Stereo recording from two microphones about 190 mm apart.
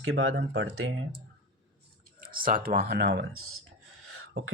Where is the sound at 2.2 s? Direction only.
50° right (ahead or behind); by 3.4 s 65° right (ahead or behind).